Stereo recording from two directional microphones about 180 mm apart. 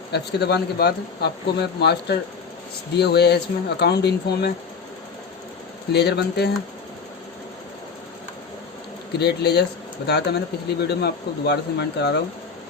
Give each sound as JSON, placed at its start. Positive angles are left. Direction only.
{"t": 0.1, "sound": "speech", "side_deg": 70}
{"t": 5.9, "sound": "speech", "side_deg": 65}
{"t": 9.1, "sound": "speech", "side_deg": 65}